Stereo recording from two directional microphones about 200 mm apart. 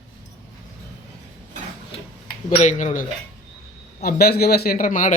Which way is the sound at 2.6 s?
35° left (ahead or behind).